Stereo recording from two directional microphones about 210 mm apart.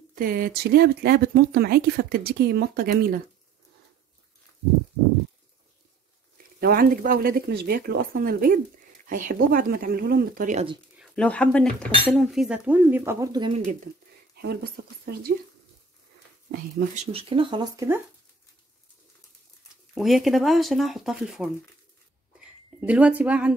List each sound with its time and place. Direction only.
0.1 s speech: 45° right (ahead or behind)
6.6 s speech: 45° right (ahead or behind)
11.0 s speech: 5° left (ahead or behind)
12.1 s cutlery: centre (ahead or behind); by 13.5 s 15° right (ahead or behind)
14.3 s speech: 50° right (ahead or behind)
16.7 s speech: 35° right (ahead or behind); by 18.0 s 10° right (ahead or behind)
19.9 s speech: centre (ahead or behind)
22.8 s cutlery: 5° right (ahead or behind)